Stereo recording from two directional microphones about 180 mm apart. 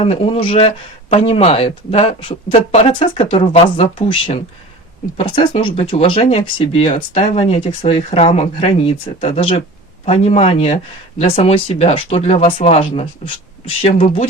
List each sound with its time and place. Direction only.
0.0 s speech: 30° left (ahead or behind)